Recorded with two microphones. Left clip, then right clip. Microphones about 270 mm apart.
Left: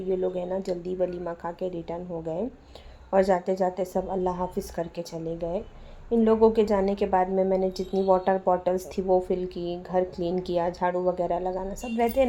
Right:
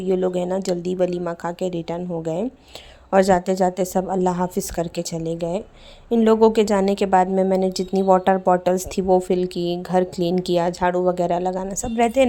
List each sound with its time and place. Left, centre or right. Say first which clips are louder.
0.1 s a woman's voice: right 6 dB; right